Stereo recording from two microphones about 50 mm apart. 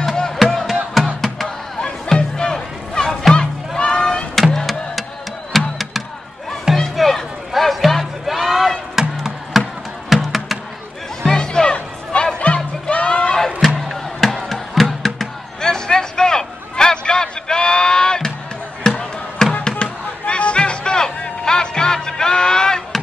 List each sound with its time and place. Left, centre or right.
0.0 s music: centre
2.1 s music: centre
4.6 s music: centre
8.5 s a sound: centre
9.2 s music: centre
11.2 s music: centre
13.7 s music: centre